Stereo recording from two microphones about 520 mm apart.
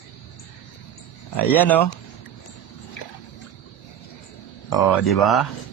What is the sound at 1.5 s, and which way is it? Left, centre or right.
Speech, centre.